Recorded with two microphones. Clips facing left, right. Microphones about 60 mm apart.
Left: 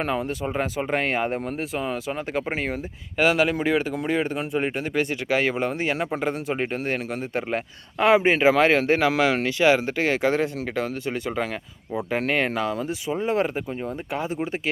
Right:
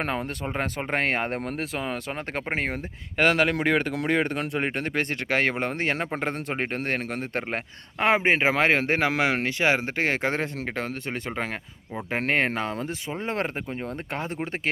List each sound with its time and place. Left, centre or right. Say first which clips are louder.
0.0 s speech: left 3 dB; right
7.9 s speech: left 3 dB; right